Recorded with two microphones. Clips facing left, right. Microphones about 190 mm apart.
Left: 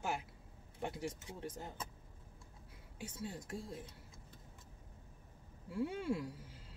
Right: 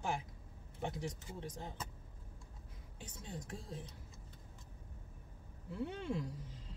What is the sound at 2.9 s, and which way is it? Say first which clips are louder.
Speech: left 4 dB; 5° left (ahead or behind).